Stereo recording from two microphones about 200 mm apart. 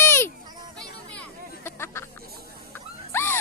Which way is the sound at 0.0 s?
10° left (ahead or behind).